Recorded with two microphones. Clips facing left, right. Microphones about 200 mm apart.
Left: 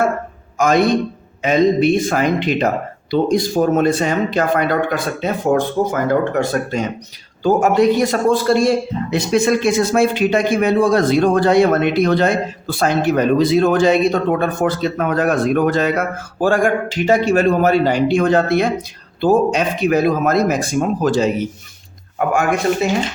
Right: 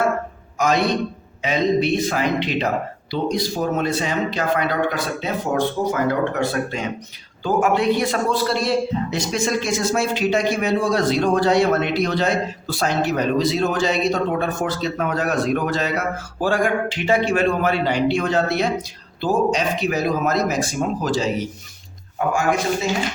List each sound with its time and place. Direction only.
0.6 s a man's voice: 50° left (ahead or behind)